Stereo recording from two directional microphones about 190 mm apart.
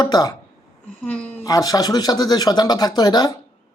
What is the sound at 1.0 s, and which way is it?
Speech, 10° left (ahead or behind).